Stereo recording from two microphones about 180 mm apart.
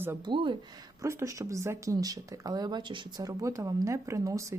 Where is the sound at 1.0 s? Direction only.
15° right (ahead or behind).